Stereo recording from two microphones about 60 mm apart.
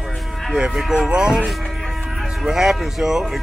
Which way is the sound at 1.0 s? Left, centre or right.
Centre.